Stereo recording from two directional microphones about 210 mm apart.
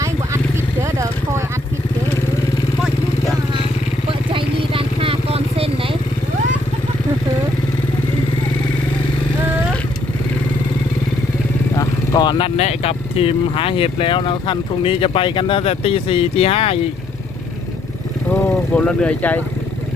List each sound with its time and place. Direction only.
4.4 s vehicle: 25° right (ahead or behind)
11.7 s speech: 15° left (ahead or behind)
18.3 s speech: 5° left (ahead or behind)